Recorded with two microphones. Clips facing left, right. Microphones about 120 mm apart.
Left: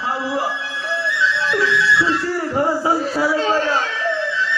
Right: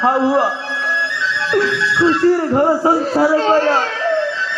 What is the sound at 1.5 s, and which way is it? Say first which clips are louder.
A man's voice: right 4 dB; 45° right (ahead or behind).